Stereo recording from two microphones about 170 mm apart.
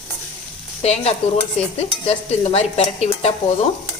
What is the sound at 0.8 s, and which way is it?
Speech, 40° left (ahead or behind).